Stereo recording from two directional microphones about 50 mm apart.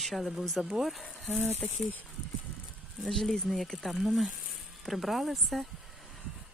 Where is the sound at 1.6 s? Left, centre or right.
Left.